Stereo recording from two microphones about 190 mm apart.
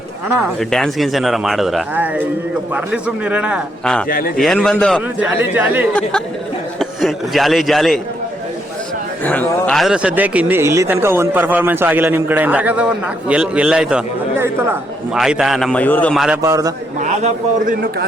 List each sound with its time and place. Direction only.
0.3 s a man's voice: centre (ahead or behind)
5.2 s a man's voice: 10° right (ahead or behind)
5.9 s a man's voice: 5° left (ahead or behind)
9.2 s a man's voice: 10° left (ahead or behind)
16.4 s a man's voice: 20° right (ahead or behind)
17.0 s a man's voice: 40° right (ahead or behind)